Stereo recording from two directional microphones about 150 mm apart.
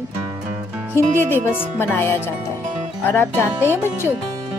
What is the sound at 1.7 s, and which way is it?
Speech, 15° left (ahead or behind).